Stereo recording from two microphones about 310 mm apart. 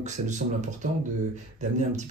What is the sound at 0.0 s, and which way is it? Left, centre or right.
Speech, right.